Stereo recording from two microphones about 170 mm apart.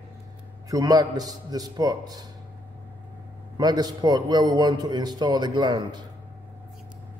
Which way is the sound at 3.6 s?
25° right (ahead or behind).